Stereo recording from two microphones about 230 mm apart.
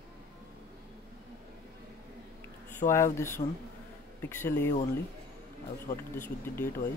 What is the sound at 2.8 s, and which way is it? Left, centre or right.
Speech, left.